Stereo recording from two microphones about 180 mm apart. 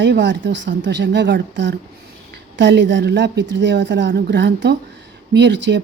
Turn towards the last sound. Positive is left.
turn(degrees=-75)  # may be behind; listen again after turning